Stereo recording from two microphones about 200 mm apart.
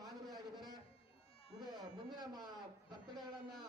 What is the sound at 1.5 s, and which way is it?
Speech, 20° right (ahead or behind).